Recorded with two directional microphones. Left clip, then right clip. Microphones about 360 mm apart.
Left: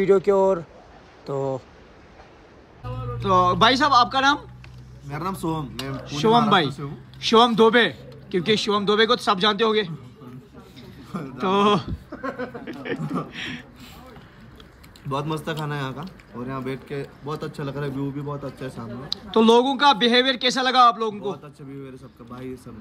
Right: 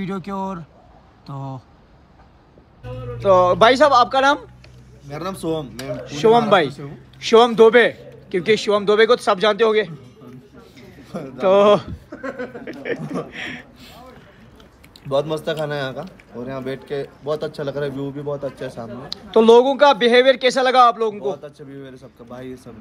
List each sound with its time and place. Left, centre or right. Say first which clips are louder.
0.0 s speech: left 10 dB; centre
3.2 s a man's voice: right 5 dB; centre
11.3 s a man's voice: right 7 dB; centre
12.1 s a sound: right 2 dB; left
12.8 s a man's voice: right 3 dB; centre
15.0 s a man's voice: right 7 dB; centre